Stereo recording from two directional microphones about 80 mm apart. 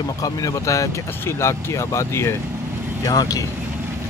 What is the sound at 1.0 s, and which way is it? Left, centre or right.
Speech, left.